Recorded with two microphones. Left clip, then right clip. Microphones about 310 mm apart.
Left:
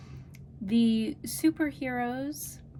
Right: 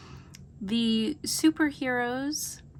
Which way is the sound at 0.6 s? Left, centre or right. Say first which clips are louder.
Even; right.